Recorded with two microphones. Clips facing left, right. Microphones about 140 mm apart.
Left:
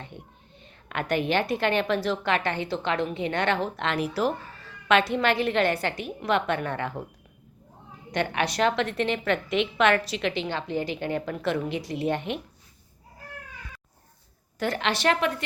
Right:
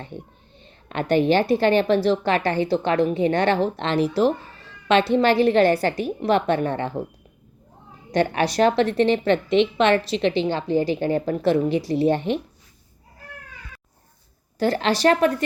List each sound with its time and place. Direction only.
0.6 s a woman's voice: 30° right (ahead or behind)
8.1 s a woman's voice: 35° right (ahead or behind)
14.6 s a woman's voice: 35° right (ahead or behind)